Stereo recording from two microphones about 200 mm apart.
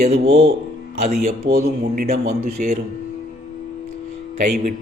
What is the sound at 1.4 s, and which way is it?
Speech, 50° right (ahead or behind).